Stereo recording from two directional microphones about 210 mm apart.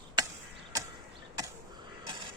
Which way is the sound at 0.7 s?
15° right (ahead or behind).